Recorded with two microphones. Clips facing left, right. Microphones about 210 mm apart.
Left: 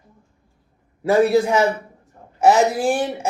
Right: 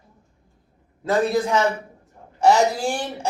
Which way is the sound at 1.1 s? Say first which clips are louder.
Left 4 dB; 10° left (ahead or behind).